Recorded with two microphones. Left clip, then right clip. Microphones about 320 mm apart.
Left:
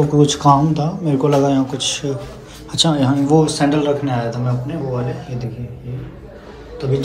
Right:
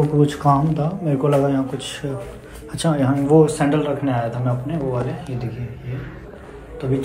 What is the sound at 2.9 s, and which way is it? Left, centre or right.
A man's voice, centre.